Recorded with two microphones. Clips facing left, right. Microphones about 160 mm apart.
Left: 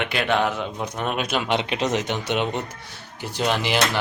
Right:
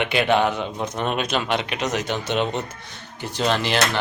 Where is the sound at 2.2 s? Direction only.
15° left (ahead or behind).